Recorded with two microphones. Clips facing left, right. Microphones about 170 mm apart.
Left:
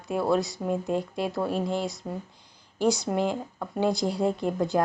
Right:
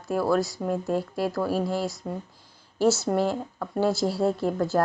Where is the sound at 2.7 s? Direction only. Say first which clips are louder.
Right 2 dB; 5° right (ahead or behind).